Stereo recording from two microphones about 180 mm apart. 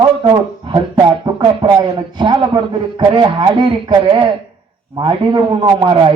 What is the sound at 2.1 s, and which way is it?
Speech, 25° right (ahead or behind).